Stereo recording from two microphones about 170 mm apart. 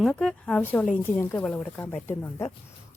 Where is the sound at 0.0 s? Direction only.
5° left (ahead or behind).